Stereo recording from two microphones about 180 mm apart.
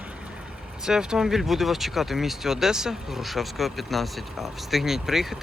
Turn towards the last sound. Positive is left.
turn(degrees=0)  # may be behind; listen again after turning